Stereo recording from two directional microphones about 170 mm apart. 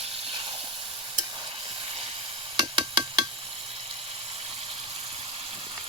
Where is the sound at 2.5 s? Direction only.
25° right (ahead or behind).